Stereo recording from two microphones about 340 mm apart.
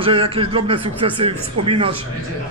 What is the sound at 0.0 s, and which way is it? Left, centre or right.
A man's voice, centre.